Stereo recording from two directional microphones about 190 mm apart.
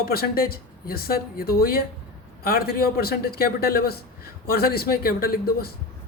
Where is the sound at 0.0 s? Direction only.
55° left (ahead or behind).